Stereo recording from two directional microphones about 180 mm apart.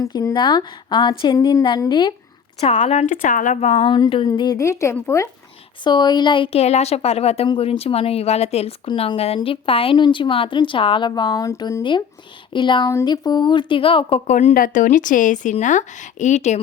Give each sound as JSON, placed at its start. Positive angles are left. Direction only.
{"t": 0.0, "sound": "a woman's voice", "side_deg": 20}